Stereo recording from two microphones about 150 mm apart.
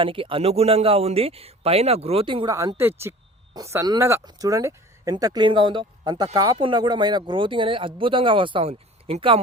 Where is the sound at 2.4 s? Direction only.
20° right (ahead or behind).